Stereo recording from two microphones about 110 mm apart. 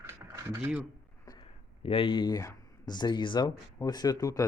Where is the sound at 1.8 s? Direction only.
60° left (ahead or behind).